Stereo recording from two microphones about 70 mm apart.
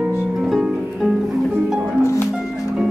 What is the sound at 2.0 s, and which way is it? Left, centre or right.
Music, left.